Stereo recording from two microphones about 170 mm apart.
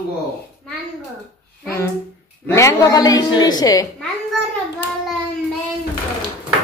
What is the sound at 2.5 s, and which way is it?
A woman's voice, 20° left (ahead or behind).